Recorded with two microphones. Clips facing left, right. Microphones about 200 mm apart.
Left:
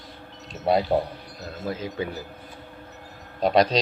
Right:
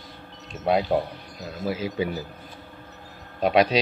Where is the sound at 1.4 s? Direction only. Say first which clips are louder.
Right 3 dB; 10° right (ahead or behind).